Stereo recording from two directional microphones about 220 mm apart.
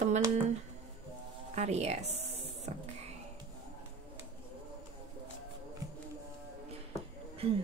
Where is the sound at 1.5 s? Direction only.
30° right (ahead or behind).